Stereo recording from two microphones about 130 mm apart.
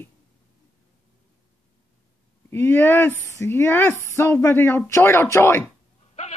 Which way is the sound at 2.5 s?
15° left (ahead or behind).